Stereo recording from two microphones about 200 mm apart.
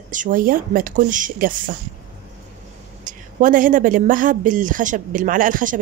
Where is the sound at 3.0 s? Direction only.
40° right (ahead or behind).